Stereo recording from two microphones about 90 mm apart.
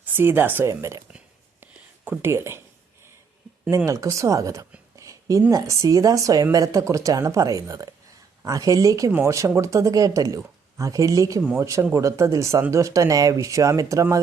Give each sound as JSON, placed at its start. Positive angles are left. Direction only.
{"t": 0.0, "sound": "speech", "side_deg": -20}
{"t": 0.7, "sound": "speech", "side_deg": -35}
{"t": 1.6, "sound": "a sound", "side_deg": -20}
{"t": 2.3, "sound": "speech", "side_deg": -30}
{"t": 3.8, "sound": "speech", "side_deg": -35}
{"t": 4.9, "sound": "a sound", "side_deg": -35}
{"t": 5.5, "sound": "speech", "side_deg": -35}